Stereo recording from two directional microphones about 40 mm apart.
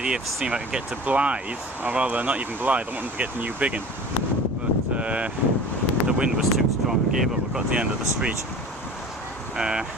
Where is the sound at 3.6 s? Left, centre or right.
Right.